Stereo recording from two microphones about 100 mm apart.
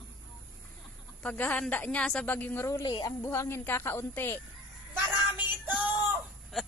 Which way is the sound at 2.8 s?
55° left (ahead or behind).